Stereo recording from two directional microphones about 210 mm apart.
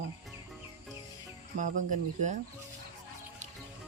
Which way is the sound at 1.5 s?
40° right (ahead or behind).